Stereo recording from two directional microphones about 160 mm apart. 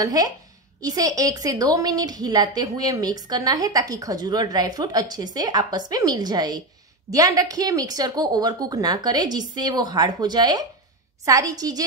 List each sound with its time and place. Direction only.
0.0 s a woman's voice: 25° right (ahead or behind)